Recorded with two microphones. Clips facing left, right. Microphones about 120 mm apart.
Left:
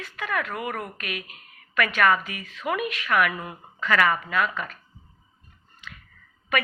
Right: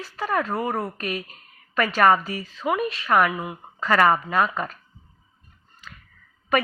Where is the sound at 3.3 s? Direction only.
15° right (ahead or behind).